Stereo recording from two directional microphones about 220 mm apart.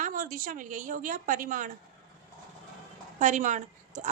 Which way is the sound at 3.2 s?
35° right (ahead or behind).